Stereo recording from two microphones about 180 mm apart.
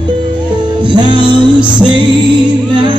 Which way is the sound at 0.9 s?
25° right (ahead or behind).